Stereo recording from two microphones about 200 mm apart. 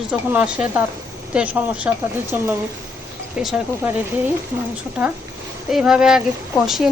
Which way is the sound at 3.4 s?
5° right (ahead or behind).